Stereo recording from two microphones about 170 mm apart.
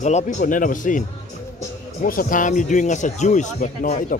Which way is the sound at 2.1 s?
55° left (ahead or behind).